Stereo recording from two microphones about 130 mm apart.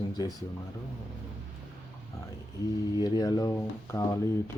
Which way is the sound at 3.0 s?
30° left (ahead or behind).